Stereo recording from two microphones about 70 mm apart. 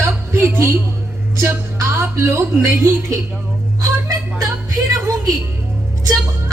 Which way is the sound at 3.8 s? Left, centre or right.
Right.